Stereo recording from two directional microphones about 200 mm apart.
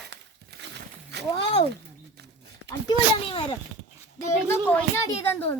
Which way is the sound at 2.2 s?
55° right (ahead or behind).